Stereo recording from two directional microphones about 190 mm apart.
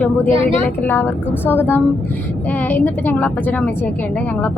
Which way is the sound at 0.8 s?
10° left (ahead or behind).